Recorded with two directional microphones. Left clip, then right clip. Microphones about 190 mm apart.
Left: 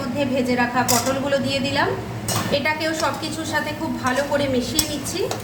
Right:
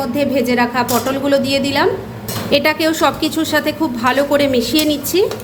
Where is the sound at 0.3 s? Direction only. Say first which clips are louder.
Right 4 dB; 45° right (ahead or behind).